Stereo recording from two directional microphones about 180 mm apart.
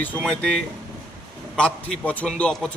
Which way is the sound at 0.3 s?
5° left (ahead or behind).